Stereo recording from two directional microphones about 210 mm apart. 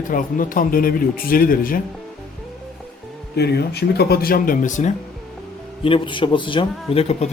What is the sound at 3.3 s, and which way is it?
Speech, 50° left (ahead or behind).